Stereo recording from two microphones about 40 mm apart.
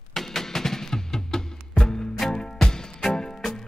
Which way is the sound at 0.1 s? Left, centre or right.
Centre.